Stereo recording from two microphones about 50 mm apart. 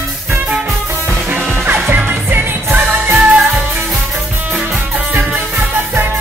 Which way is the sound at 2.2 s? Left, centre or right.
Right.